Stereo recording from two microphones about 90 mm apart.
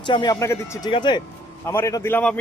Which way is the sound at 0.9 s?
60° left (ahead or behind).